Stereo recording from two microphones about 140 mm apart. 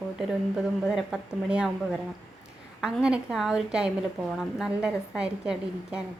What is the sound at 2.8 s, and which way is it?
A woman's voice, 5° right (ahead or behind).